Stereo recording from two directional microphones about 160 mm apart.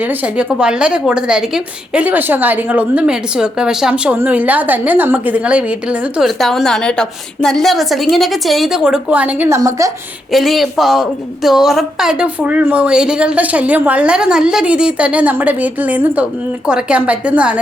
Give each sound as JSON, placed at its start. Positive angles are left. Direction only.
{"t": 0.0, "sound": "a woman's voice", "side_deg": -10}
{"t": 10.3, "sound": "a woman's voice", "side_deg": 0}